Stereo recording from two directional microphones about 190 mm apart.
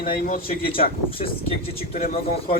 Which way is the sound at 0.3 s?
50° left (ahead or behind).